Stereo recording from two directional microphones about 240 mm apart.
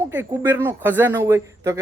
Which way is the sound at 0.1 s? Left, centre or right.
Centre.